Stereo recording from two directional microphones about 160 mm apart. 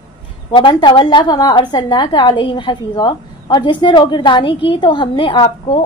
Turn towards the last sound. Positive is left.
turn(degrees=30)  # may be behind; listen again after turning